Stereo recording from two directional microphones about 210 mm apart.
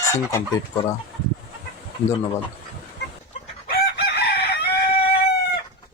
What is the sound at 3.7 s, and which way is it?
Chicken, 50° left (ahead or behind).